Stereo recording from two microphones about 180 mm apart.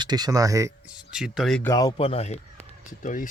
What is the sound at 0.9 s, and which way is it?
Speech, 5° right (ahead or behind).